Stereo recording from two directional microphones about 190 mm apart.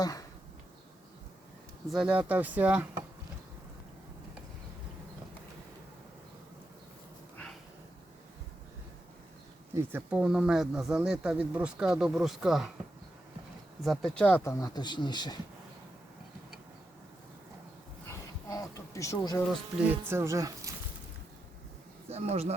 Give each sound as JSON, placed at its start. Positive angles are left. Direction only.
{"t": 0.0, "sound": "speech", "side_deg": 20}
{"t": 1.9, "sound": "speech", "side_deg": -5}
{"t": 9.7, "sound": "speech", "side_deg": -10}
{"t": 13.8, "sound": "speech", "side_deg": 0}
{"t": 14.6, "sound": "speech", "side_deg": 20}
{"t": 18.1, "sound": "bee", "side_deg": 15}
{"t": 19.9, "sound": "speech", "side_deg": -10}
{"t": 22.1, "sound": "speech", "side_deg": -35}